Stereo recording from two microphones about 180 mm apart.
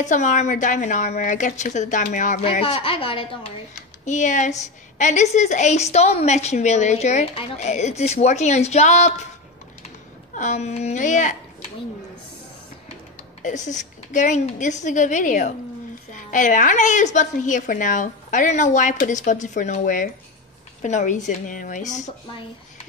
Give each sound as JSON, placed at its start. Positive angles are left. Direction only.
{"t": 0.0, "sound": "a woman's voice", "side_deg": 45}
{"t": 2.4, "sound": "a woman's voice", "side_deg": 35}
{"t": 4.0, "sound": "a woman's voice", "side_deg": 40}
{"t": 10.3, "sound": "a woman's voice", "side_deg": 40}
{"t": 13.4, "sound": "a woman's voice", "side_deg": 40}